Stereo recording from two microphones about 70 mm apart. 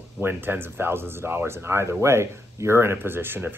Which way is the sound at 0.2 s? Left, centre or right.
Right.